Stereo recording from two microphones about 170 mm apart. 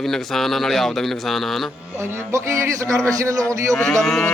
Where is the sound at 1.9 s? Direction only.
15° right (ahead or behind).